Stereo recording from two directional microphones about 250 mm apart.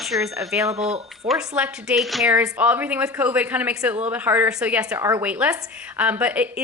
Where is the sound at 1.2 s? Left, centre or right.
Centre.